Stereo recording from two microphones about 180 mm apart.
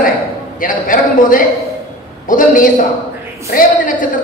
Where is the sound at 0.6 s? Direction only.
50° left (ahead or behind).